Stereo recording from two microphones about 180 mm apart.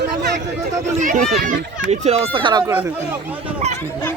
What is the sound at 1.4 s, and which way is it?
Speech, 60° right (ahead or behind).